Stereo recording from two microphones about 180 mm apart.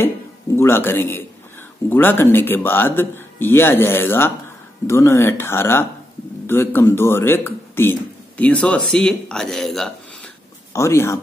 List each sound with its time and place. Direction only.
0.6 s a man's voice: 10° left (ahead or behind)
10.7 s speech: 15° left (ahead or behind)